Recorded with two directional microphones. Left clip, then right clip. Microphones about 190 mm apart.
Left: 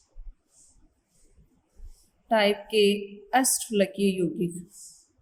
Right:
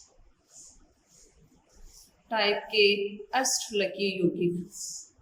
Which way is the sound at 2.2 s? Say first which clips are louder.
Left 4 dB; 40° left (ahead or behind).